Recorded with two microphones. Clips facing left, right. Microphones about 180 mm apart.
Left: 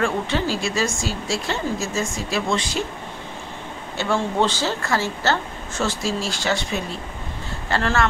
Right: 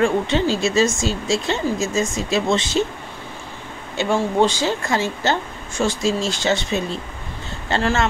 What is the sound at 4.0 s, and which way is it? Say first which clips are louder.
A woman's voice: right 3 dB; 15° right (ahead or behind).